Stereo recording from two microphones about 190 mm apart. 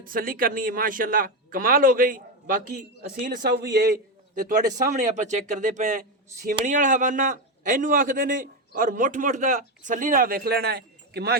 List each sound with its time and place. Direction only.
0.0 s a man's voice: 50° right (ahead or behind)
3.2 s a man's voice: 55° right (ahead or behind)